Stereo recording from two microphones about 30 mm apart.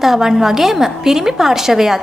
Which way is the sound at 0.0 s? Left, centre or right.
Centre.